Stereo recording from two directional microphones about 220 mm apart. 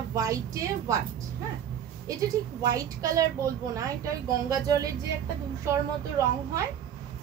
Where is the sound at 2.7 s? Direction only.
15° right (ahead or behind).